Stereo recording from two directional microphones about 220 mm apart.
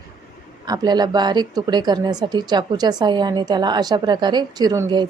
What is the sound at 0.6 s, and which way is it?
A woman's voice, 20° right (ahead or behind).